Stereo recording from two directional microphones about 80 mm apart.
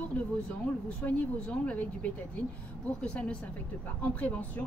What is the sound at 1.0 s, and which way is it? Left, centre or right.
Speech, centre.